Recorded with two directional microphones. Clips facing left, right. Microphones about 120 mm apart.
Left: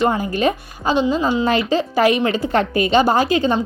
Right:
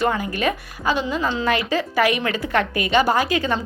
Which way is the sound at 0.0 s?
30° left (ahead or behind).